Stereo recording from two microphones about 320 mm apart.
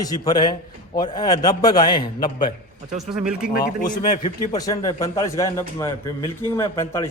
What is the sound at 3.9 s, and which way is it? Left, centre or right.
A man's voice, centre.